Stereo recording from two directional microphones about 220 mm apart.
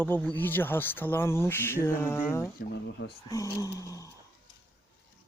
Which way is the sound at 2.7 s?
55° left (ahead or behind).